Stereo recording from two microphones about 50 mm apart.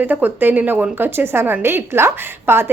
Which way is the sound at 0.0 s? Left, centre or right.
Right.